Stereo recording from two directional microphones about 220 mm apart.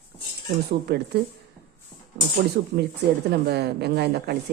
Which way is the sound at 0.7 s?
45° right (ahead or behind).